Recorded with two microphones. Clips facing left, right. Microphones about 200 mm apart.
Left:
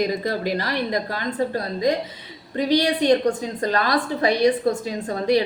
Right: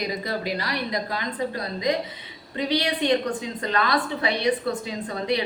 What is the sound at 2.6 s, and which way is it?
A woman's voice, 40° left (ahead or behind).